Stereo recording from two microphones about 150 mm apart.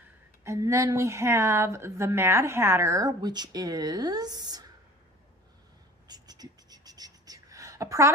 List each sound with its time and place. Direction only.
0.4 s a woman's voice: 20° right (ahead or behind)
6.1 s writing: 25° right (ahead or behind)